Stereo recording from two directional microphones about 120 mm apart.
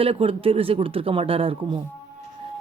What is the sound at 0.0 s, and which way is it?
A man's voice, 50° right (ahead or behind).